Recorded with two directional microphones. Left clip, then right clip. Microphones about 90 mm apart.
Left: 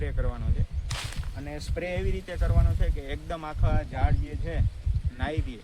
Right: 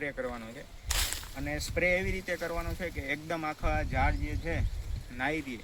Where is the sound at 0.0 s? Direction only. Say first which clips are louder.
Right 1 dB; 15° left (ahead or behind).